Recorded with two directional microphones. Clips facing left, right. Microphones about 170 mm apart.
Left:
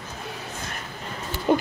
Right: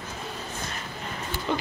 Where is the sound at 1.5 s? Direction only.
50° left (ahead or behind).